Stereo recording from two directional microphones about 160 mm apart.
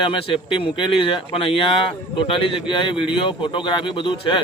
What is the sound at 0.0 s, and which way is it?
Speech, 30° left (ahead or behind).